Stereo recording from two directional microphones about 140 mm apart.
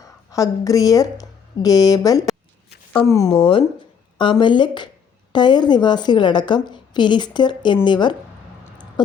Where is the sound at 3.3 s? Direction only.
40° left (ahead or behind).